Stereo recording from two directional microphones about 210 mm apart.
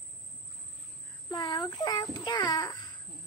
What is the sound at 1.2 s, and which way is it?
A child's voice, 20° left (ahead or behind).